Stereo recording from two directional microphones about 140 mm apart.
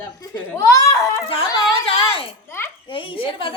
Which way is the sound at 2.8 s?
35° left (ahead or behind).